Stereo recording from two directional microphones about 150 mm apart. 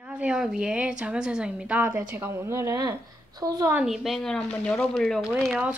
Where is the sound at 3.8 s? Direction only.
Centre (ahead or behind).